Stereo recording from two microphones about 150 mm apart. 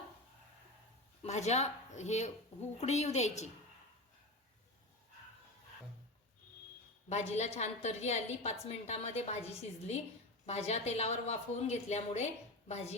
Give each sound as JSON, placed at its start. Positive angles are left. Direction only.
{"t": 1.2, "sound": "speech", "side_deg": 50}
{"t": 7.1, "sound": "speech", "side_deg": 45}